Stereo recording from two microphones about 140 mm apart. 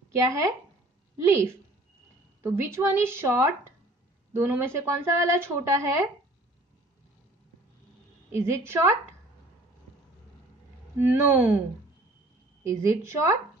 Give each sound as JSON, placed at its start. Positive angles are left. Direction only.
{"t": 0.2, "sound": "a woman's voice", "side_deg": -20}
{"t": 8.3, "sound": "speech", "side_deg": -20}
{"t": 11.1, "sound": "a woman's voice", "side_deg": -15}
{"t": 12.6, "sound": "speech", "side_deg": -20}